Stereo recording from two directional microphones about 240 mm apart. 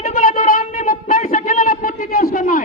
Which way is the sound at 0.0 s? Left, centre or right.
Left.